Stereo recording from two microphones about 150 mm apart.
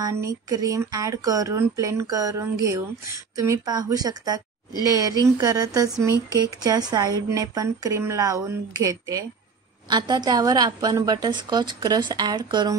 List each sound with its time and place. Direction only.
0.0 s a woman's voice: 20° right (ahead or behind)